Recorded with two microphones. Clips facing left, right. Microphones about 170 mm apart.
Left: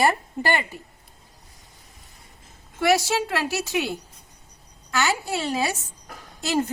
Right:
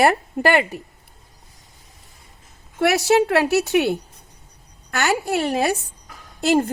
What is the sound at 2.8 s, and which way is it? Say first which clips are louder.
A woman's voice: right 5 dB; 65° right (ahead or behind).